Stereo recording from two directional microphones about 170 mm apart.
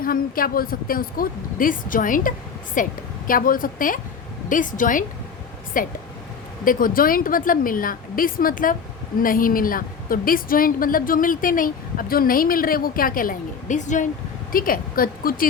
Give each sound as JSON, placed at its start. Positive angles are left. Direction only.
{"t": 0.0, "sound": "a woman's voice", "side_deg": 60}
{"t": 14.5, "sound": "a woman's voice", "side_deg": 55}